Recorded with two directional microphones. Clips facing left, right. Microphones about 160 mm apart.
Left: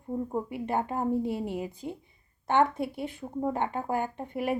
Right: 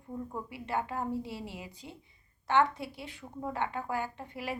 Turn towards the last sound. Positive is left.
turn(degrees=50)  # may be behind; listen again after turning